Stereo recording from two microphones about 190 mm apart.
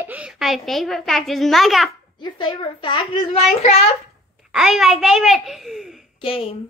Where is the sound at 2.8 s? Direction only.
25° left (ahead or behind).